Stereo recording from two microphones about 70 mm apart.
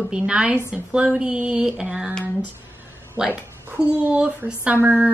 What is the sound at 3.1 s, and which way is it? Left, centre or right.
A child's voice, centre.